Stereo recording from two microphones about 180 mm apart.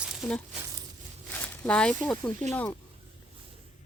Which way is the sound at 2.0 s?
5° left (ahead or behind).